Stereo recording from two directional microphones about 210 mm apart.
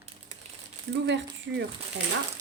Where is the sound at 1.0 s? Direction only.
60° right (ahead or behind).